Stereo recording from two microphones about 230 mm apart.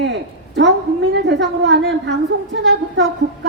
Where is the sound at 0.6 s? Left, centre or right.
Right.